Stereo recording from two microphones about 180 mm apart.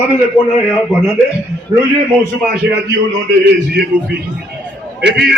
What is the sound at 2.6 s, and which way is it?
Speech, 80° right.